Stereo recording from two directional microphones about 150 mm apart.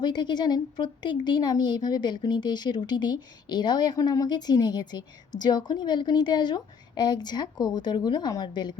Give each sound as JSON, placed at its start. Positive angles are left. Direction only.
{"t": 0.0, "sound": "speech", "side_deg": 30}